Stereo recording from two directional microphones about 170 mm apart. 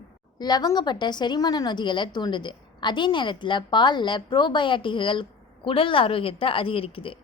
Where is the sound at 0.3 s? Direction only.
25° left (ahead or behind).